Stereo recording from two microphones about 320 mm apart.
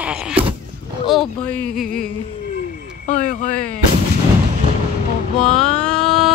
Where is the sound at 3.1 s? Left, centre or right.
Left.